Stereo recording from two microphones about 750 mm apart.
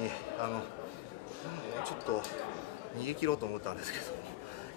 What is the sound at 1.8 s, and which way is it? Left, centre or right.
A man's voice, right.